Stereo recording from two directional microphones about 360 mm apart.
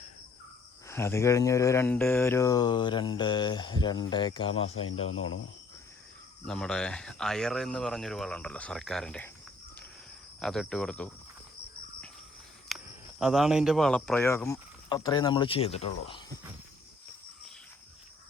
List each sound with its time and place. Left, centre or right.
0.9 s speech: centre
5.0 s speech: left
6.4 s speech: centre
10.4 s speech: centre
12.6 s speech: centre